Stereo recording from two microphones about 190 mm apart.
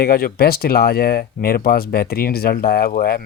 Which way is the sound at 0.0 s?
50° left (ahead or behind).